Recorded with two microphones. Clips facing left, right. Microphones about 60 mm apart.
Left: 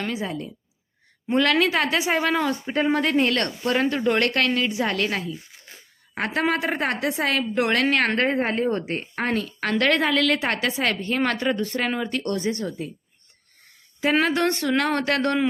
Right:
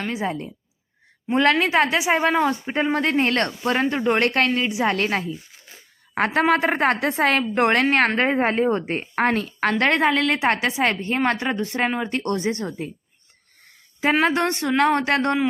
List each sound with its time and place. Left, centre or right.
0.1 s a woman's voice: right
4.9 s a woman's voice: right
8.1 s a woman's voice: right
9.1 s a woman's voice: right
14.0 s a woman's voice: right